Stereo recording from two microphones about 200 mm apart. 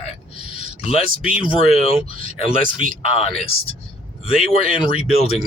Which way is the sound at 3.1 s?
30° left (ahead or behind).